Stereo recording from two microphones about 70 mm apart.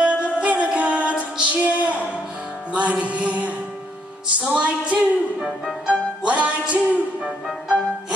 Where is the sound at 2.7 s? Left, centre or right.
Centre.